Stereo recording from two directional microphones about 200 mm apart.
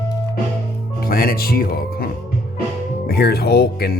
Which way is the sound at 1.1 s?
45° left (ahead or behind).